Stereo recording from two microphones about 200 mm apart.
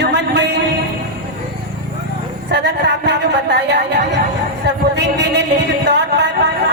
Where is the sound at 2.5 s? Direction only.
60° right (ahead or behind).